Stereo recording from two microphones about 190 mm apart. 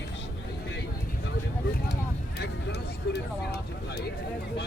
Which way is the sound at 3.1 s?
55° left (ahead or behind).